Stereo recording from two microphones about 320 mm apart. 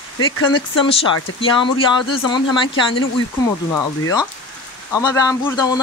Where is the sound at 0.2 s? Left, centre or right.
Centre.